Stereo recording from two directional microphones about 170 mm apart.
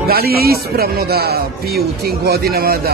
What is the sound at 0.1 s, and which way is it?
A man's voice, 65° right (ahead or behind).